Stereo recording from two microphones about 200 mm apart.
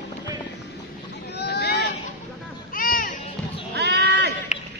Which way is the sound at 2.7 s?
45° left (ahead or behind).